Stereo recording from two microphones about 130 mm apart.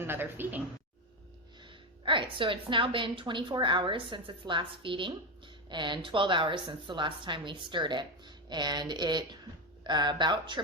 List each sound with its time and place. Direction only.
0.0 s speech: 15° right (ahead or behind)
1.6 s a woman's voice: 40° right (ahead or behind)